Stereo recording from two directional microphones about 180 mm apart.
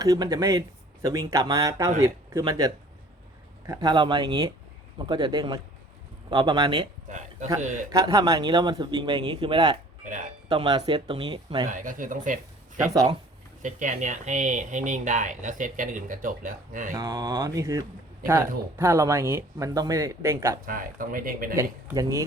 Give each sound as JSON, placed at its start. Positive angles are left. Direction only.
{"t": 0.0, "sound": "speech", "side_deg": -20}
{"t": 7.1, "sound": "a sound", "side_deg": -45}
{"t": 7.6, "sound": "speech", "side_deg": -40}
{"t": 7.9, "sound": "speech", "side_deg": -25}
{"t": 10.0, "sound": "speech", "side_deg": -45}
{"t": 10.5, "sound": "speech", "side_deg": -25}
{"t": 11.7, "sound": "speech", "side_deg": -45}
{"t": 12.8, "sound": "speech", "side_deg": -20}
{"t": 13.6, "sound": "speech", "side_deg": -45}
{"t": 16.9, "sound": "speech", "side_deg": -20}
{"t": 20.6, "sound": "speech", "side_deg": -50}
{"t": 21.5, "sound": "speech", "side_deg": -15}